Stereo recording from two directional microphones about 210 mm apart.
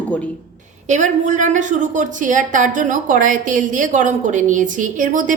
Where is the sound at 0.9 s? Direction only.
35° right (ahead or behind).